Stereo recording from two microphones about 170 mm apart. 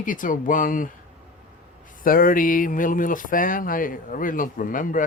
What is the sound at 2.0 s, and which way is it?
Speech, 55° left (ahead or behind).